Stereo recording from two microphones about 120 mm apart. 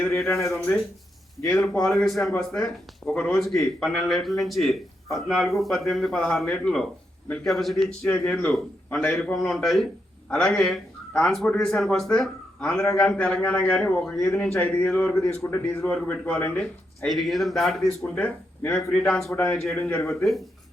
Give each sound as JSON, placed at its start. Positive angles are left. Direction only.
{"t": 0.0, "sound": "speech", "side_deg": 20}
{"t": 1.7, "sound": "a man's voice", "side_deg": 5}
{"t": 19.8, "sound": "speech", "side_deg": 20}